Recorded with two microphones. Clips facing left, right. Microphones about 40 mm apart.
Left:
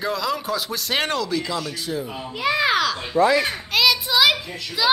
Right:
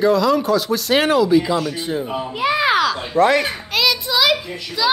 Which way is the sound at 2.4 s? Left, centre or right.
Centre.